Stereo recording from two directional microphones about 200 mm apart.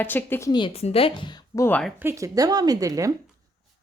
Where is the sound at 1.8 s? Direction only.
Centre (ahead or behind).